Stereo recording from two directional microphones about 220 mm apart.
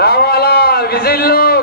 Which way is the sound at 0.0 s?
45° left (ahead or behind).